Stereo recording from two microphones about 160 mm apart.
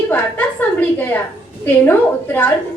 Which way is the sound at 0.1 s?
10° left (ahead or behind).